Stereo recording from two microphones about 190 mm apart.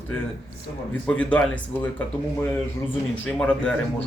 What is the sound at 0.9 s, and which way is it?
A man's voice, 5° left (ahead or behind).